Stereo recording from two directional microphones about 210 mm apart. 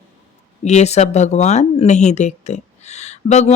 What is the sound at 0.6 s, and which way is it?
Speech, 30° left (ahead or behind).